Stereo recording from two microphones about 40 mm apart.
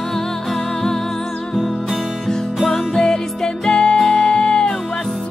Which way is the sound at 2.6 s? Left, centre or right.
Centre.